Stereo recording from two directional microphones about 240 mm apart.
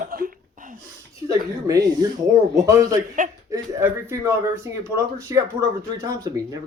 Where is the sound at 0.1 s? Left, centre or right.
Right.